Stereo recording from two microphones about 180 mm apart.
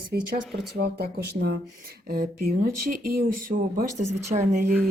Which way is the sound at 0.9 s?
60° right (ahead or behind).